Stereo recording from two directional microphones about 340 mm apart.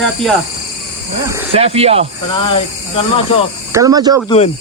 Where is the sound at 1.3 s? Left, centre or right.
Centre.